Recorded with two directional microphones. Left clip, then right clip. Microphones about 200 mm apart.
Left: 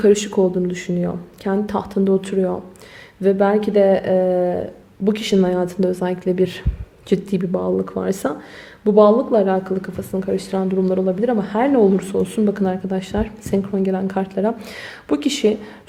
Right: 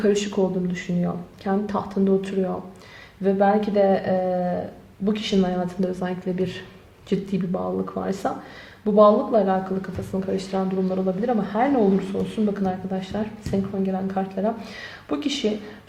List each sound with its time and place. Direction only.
0.0 s speech: 40° left (ahead or behind)